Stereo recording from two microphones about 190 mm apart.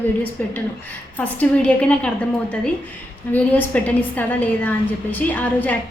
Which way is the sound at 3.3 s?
10° left (ahead or behind).